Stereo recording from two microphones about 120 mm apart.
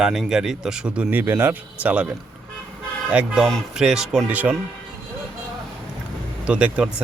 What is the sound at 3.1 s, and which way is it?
Speech, 10° right (ahead or behind).